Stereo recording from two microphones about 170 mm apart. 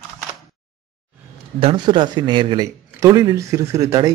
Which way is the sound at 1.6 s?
30° right (ahead or behind).